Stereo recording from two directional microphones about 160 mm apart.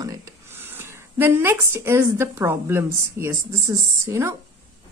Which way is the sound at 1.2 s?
15° right (ahead or behind).